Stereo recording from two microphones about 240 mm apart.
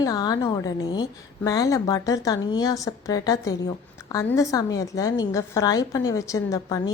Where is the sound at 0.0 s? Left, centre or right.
Centre.